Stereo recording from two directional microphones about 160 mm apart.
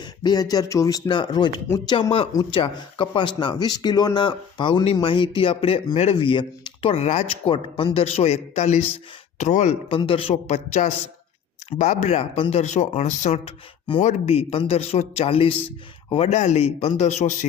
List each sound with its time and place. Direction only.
0.0 s speech: 25° left (ahead or behind); by 10.0 s 45° left (ahead or behind)
10.0 s speech: 35° left (ahead or behind)